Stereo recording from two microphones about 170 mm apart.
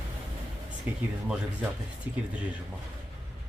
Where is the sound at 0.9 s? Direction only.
10° right (ahead or behind).